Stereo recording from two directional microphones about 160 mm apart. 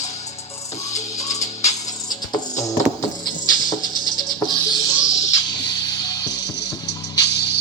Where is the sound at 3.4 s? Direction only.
25° left (ahead or behind).